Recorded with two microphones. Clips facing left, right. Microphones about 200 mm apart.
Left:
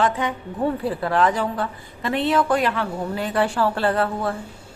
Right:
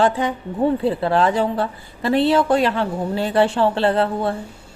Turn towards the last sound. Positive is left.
turn(degrees=-25)  # may be behind; listen again after turning